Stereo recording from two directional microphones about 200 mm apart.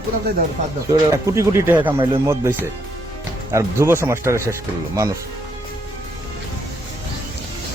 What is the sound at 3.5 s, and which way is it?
Speech, 15° right (ahead or behind).